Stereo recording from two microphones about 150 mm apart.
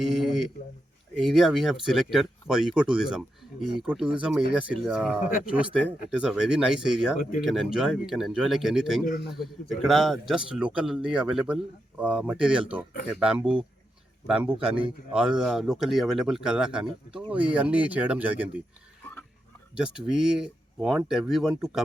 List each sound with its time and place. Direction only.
0.0 s a man's voice: centre (ahead or behind)
7.2 s speech: 65° left (ahead or behind)
7.4 s a man's voice: 5° right (ahead or behind)
19.7 s a man's voice: 5° right (ahead or behind)